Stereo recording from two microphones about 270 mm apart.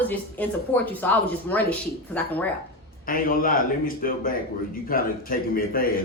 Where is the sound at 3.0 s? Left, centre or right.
Left.